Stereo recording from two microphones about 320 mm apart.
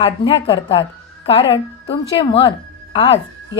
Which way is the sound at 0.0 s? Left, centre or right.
Centre.